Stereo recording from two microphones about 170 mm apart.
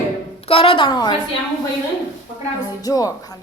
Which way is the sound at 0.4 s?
35° left (ahead or behind).